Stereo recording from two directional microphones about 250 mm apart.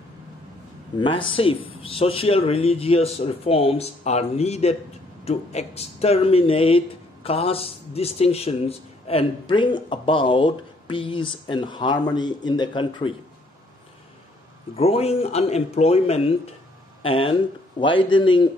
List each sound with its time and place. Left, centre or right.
0.9 s a man's voice: centre
14.8 s a man's voice: left